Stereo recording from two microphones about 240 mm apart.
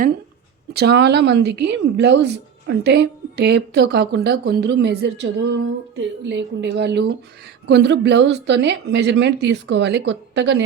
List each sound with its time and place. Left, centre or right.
0.7 s a woman's voice: right